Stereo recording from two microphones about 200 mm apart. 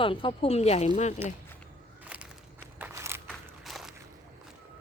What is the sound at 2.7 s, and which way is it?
Walk, 10° right (ahead or behind).